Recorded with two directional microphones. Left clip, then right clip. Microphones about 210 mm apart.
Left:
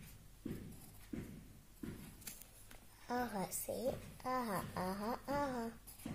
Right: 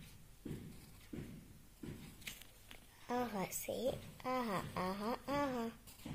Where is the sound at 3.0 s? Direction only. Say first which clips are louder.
Right 1 dB; 30° right (ahead or behind).